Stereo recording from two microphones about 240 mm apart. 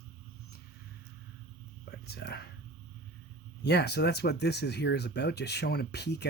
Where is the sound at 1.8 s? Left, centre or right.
Left.